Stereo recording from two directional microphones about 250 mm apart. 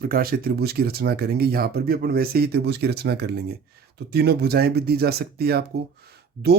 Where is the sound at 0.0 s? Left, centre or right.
Right.